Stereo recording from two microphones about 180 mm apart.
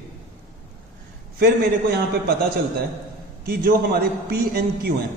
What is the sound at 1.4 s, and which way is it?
Speech, 60° right (ahead or behind).